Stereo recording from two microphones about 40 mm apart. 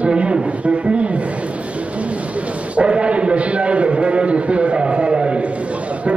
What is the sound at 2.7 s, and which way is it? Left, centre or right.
A man's voice, right.